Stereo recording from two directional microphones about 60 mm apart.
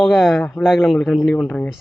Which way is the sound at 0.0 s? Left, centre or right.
Centre.